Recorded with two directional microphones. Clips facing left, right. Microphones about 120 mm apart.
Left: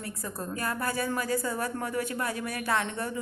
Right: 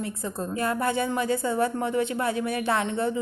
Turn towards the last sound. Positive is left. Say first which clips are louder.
# right 5 dB
turn(degrees=-25)  # may be behind; listen again after turning